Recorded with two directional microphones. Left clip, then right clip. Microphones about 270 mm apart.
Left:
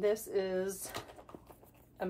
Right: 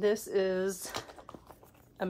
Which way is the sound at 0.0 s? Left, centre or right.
Centre.